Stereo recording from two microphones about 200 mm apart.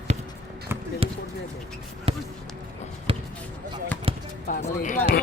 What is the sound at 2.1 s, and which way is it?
Speech, 30° right (ahead or behind).